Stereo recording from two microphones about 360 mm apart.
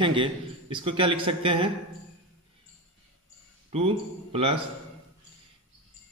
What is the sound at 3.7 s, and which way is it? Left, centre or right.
Speech, centre.